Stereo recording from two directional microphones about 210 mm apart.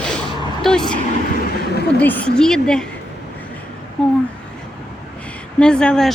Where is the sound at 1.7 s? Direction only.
50° left (ahead or behind).